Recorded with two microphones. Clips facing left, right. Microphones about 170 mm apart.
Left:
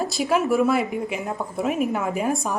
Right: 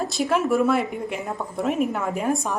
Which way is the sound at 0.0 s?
Centre (ahead or behind).